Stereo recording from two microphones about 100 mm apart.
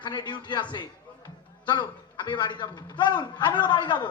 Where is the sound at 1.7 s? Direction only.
50° left (ahead or behind).